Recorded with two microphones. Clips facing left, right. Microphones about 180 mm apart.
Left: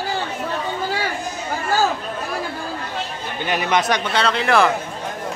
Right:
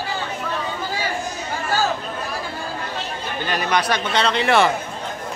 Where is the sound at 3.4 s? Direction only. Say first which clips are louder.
Left 2 dB; 15° left (ahead or behind).